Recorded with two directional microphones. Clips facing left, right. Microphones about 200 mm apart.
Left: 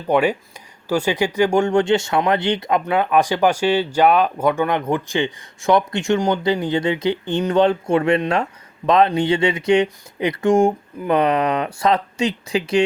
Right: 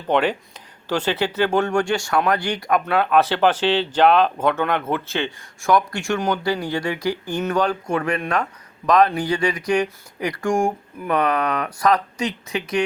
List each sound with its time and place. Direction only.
0.1 s speech: 10° left (ahead or behind); by 12.8 s 30° left (ahead or behind)